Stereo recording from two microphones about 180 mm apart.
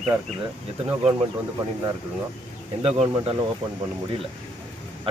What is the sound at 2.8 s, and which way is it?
Speech, 35° right (ahead or behind).